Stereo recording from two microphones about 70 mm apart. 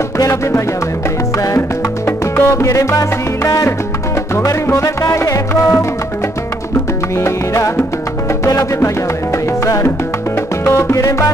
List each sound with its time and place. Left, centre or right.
2.0 s music: left
4.4 s music: left
7.2 s music: left
10.6 s music: left